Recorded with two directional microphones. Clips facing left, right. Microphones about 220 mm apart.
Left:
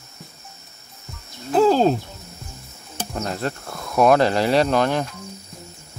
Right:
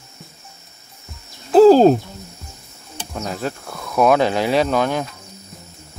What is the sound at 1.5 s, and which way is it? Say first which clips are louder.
Speech: right 7 dB; 35° right (ahead or behind).